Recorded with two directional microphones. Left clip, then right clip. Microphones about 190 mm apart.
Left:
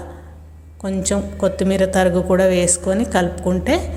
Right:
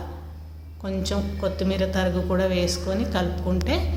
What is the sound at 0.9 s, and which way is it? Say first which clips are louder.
Speech: left 7 dB; 35° left (ahead or behind).